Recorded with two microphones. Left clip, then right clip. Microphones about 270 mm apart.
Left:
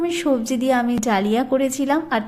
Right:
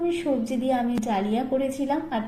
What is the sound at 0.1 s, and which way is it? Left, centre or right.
A woman's voice, left.